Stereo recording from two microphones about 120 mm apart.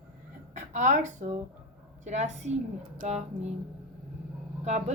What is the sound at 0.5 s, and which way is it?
A woman's voice, 90° right.